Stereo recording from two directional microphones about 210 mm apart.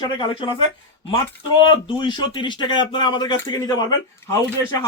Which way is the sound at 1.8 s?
20° left (ahead or behind).